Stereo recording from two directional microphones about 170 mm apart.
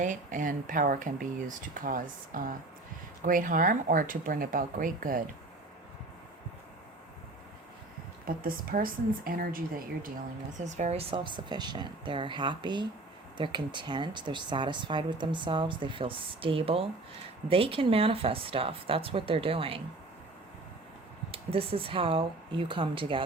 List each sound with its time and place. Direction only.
0.0 s speech: 50° right (ahead or behind)
8.2 s a woman's voice: 55° right (ahead or behind)
10.6 s speech: 40° right (ahead or behind)
21.3 s speech: 35° right (ahead or behind)